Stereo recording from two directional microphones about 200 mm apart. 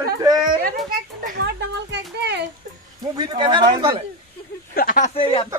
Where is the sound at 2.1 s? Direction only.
55° right (ahead or behind).